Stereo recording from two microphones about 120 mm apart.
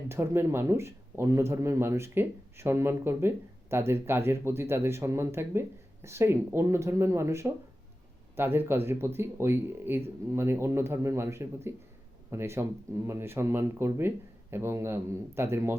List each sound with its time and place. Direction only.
0.1 s speech: 20° right (ahead or behind)